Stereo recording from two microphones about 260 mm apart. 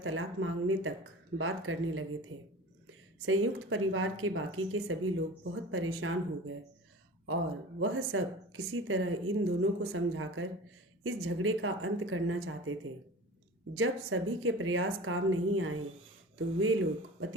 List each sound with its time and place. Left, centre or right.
0.0 s speech: right
3.2 s speech: right
7.8 s speech: right